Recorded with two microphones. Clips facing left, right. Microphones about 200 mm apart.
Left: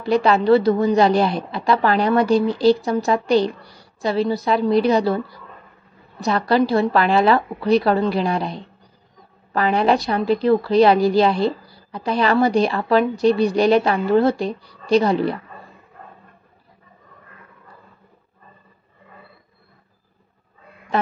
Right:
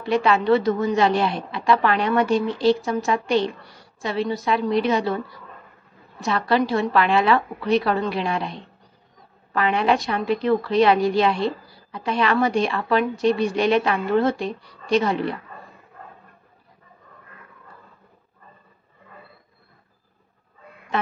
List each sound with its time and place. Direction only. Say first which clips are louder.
0.0 s a woman's voice: left 3 dB; 35° left (ahead or behind)
6.2 s a woman's voice: left 3 dB; 35° left (ahead or behind)